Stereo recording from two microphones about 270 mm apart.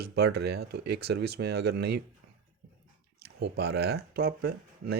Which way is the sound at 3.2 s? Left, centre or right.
Right.